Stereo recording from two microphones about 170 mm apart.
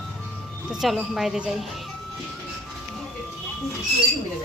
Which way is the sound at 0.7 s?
Centre (ahead or behind).